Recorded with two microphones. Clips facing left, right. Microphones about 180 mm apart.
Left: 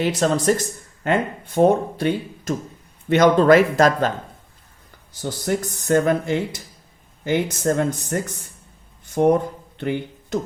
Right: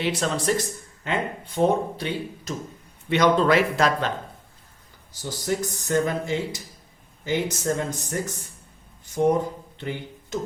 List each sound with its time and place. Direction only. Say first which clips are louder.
0.0 s speech: left 6 dB; 40° left (ahead or behind)
5.2 s speech: left 3 dB; 60° left (ahead or behind)
9.7 s a sound: left 7 dB; 60° left (ahead or behind)